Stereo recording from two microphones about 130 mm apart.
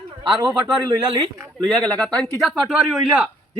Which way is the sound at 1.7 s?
10° left (ahead or behind).